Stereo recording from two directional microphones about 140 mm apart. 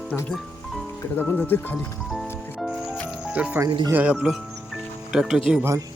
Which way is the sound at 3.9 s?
10° right (ahead or behind).